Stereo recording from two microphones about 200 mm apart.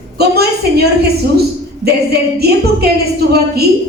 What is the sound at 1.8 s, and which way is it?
A woman's voice, 50° right (ahead or behind).